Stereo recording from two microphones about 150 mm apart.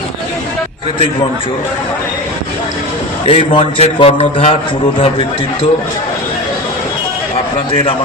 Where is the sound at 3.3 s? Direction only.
40° left (ahead or behind).